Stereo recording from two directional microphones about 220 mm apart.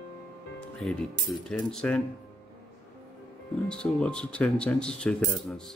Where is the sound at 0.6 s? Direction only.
Centre (ahead or behind).